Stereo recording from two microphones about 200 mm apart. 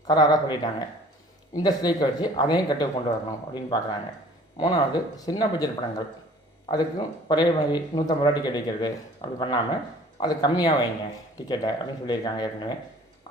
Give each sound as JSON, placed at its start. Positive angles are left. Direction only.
{"t": 0.0, "sound": "speech", "side_deg": 20}